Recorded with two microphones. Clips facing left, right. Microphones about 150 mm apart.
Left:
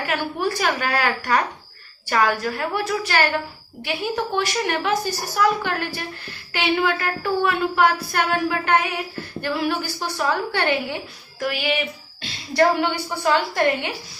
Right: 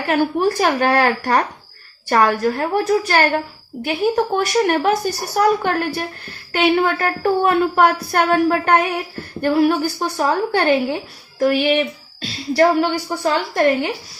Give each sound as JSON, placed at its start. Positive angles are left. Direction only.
{"t": 0.3, "sound": "a woman's voice", "side_deg": -40}